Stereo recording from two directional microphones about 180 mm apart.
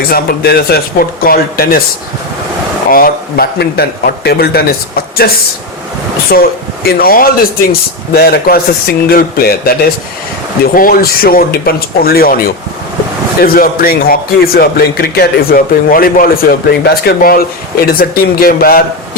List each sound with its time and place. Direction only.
0.1 s a man's voice: 60° left (ahead or behind)
2.9 s a man's voice: 55° left (ahead or behind)
6.3 s a man's voice: 55° left (ahead or behind)